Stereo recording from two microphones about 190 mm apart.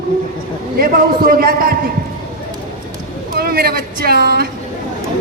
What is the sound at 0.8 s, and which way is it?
Speech, 50° right (ahead or behind).